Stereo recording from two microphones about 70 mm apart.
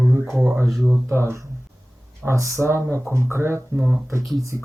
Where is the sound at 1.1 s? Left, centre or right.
Right.